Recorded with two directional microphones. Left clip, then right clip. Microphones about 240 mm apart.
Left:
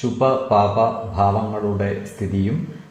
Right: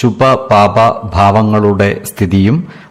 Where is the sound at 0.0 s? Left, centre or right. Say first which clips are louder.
Right 9 dB; right.